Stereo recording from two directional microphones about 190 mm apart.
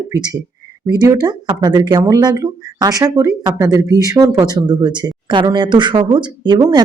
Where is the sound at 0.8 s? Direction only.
20° right (ahead or behind).